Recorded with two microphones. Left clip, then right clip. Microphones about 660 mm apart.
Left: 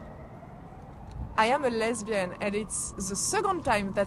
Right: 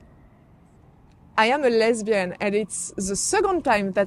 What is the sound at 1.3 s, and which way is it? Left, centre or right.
A woman's voice, right.